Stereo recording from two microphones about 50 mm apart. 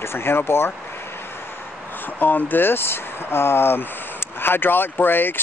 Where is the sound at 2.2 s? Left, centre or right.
Left.